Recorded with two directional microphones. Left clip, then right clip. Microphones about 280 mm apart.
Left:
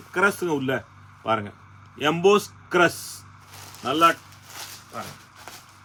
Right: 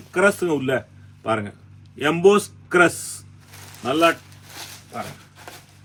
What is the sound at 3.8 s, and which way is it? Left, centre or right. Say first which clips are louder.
Speech: right 1 dB; centre.